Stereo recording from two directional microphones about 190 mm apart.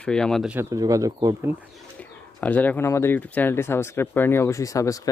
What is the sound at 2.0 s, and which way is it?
Speech, 5° left (ahead or behind).